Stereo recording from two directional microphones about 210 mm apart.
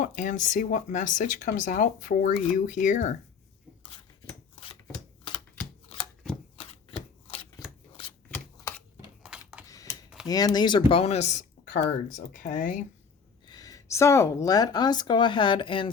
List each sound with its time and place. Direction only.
0.0 s speech: 40° left (ahead or behind)
6.6 s shuffling cards: 25° left (ahead or behind)
9.2 s a sound: 5° right (ahead or behind)
10.2 s speech: 20° left (ahead or behind); by 12.8 s 35° left (ahead or behind)
13.5 s speech: 15° left (ahead or behind)